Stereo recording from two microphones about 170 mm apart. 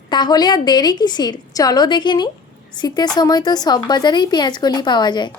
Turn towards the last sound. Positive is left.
turn(degrees=25)  # may be behind; listen again after turning